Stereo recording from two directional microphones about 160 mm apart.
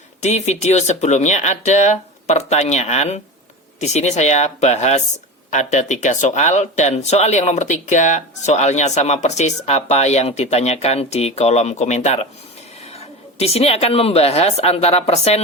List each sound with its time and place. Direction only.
0.2 s a woman's voice: 45° left (ahead or behind)